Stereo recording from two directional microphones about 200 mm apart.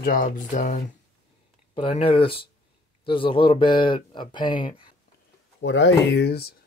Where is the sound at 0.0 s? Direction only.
45° left (ahead or behind).